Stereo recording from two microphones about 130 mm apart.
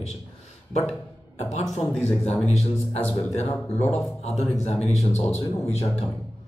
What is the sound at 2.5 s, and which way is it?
Speech, 50° left (ahead or behind).